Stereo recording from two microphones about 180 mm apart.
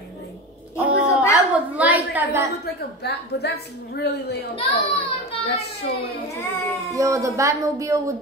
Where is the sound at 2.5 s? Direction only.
65° left (ahead or behind).